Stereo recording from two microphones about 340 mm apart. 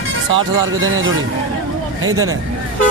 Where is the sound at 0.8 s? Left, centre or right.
Right.